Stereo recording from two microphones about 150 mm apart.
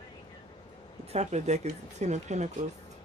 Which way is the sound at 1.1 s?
50° right (ahead or behind).